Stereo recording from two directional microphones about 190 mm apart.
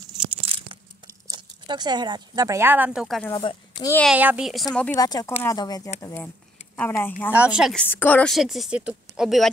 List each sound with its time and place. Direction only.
0.0 s tearing: 30° right (ahead or behind)
1.3 s speech: 20° right (ahead or behind); by 3.3 s centre (ahead or behind)
3.3 s speech: 25° left (ahead or behind)
4.1 s speech: 5° right (ahead or behind)
4.9 s speech: 20° left (ahead or behind)
7.3 s speech: 5° right (ahead or behind)
7.8 s speech: 10° left (ahead or behind)